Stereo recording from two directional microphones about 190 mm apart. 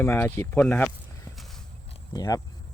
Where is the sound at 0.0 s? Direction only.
10° left (ahead or behind).